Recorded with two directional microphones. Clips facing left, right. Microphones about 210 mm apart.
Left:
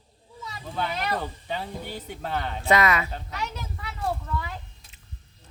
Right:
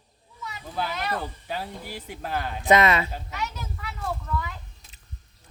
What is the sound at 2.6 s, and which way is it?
Speech, 20° right (ahead or behind).